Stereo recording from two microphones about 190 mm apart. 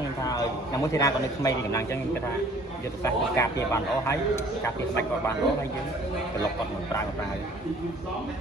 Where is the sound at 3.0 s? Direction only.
15° left (ahead or behind).